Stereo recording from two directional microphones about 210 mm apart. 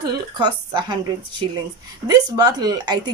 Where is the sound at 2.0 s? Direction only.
20° right (ahead or behind).